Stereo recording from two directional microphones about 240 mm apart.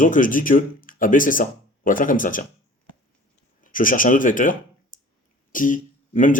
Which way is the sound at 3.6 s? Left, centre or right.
Left.